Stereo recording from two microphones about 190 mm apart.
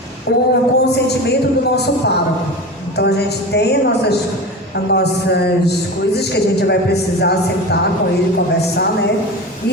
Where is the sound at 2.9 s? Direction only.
60° left (ahead or behind).